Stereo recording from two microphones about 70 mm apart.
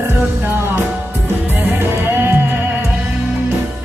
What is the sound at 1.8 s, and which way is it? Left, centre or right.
Music, right.